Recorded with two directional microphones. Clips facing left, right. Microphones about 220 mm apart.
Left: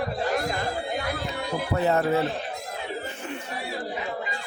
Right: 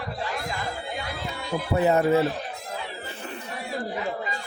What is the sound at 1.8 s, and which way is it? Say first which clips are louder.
Speech: right 3 dB; 15° right (ahead or behind).